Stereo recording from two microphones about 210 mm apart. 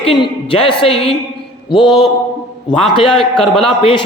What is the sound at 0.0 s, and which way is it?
A man's voice, 25° left (ahead or behind).